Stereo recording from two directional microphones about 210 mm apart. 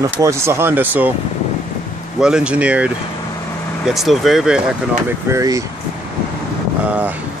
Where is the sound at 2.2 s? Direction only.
5° right (ahead or behind).